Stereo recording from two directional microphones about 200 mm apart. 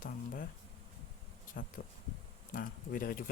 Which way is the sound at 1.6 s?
45° left (ahead or behind).